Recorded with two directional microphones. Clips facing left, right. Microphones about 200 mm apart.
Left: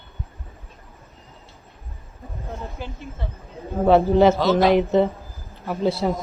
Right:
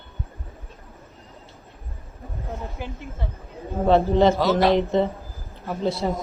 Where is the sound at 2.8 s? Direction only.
15° right (ahead or behind).